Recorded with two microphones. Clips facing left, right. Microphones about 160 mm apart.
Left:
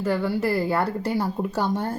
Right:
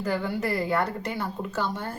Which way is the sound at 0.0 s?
30° left (ahead or behind).